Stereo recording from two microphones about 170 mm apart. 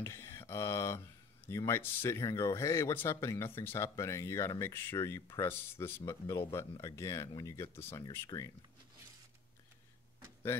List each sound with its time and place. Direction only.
0.0 s speech: 15° left (ahead or behind)